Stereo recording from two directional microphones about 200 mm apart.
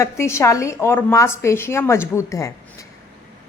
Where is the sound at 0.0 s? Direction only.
15° left (ahead or behind).